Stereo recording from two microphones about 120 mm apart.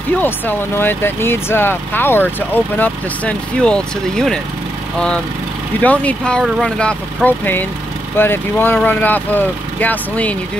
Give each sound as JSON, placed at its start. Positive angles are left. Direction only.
{"t": 0.1, "sound": "speech", "side_deg": 15}